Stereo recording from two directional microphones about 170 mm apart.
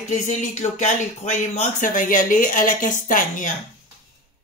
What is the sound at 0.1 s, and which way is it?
Speech, 45° left (ahead or behind).